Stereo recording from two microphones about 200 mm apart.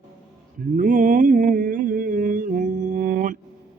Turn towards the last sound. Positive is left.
turn(degrees=-40)  # may be behind; listen again after turning